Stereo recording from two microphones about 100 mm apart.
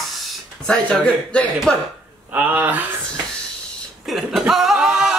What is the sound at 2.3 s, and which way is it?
Speech, 20° right (ahead or behind).